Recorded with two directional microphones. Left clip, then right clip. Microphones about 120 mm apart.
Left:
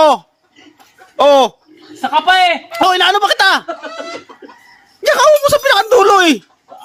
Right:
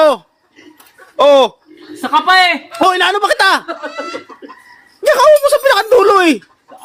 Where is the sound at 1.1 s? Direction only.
35° left (ahead or behind).